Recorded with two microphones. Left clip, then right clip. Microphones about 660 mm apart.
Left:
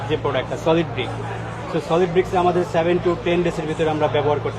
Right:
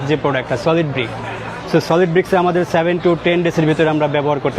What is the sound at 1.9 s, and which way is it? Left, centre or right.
Speech, right.